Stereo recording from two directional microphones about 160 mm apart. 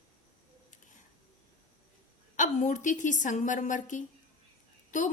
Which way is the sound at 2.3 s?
50° left (ahead or behind).